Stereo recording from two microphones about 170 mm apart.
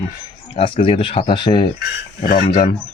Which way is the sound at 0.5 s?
30° left (ahead or behind).